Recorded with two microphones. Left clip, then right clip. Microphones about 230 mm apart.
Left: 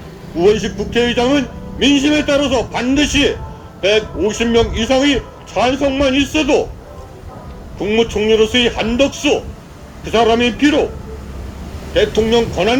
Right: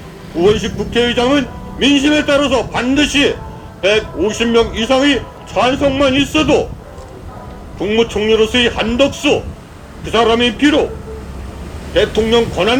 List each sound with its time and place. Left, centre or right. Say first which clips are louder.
0.3 s a man's voice: even; centre
7.8 s a man's voice: right 1 dB; centre
11.9 s a man's voice: right 1 dB; centre